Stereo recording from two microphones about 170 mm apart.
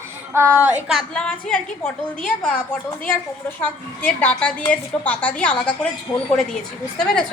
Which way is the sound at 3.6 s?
10° left (ahead or behind).